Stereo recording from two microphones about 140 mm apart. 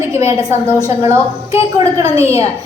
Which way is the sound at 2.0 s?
45° left (ahead or behind).